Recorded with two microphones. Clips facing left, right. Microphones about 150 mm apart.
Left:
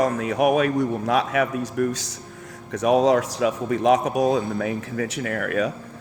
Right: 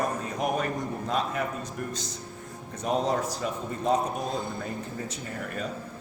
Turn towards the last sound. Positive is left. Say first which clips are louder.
# left 10 dB
turn(degrees=80)